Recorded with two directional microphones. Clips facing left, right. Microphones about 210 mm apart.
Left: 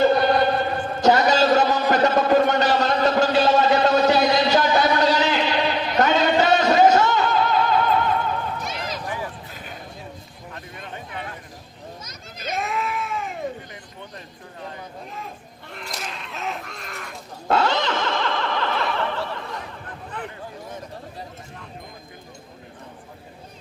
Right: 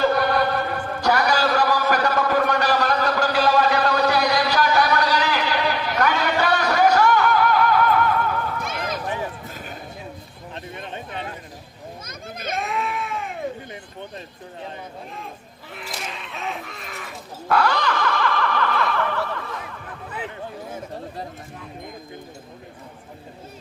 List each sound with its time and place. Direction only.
0.0 s chant: 20° left (ahead or behind)
8.6 s run: 55° right (ahead or behind)
12.0 s children playing: 55° right (ahead or behind)
12.5 s sheep: centre (ahead or behind)
15.7 s crow: centre (ahead or behind)
17.5 s snicker: 20° left (ahead or behind)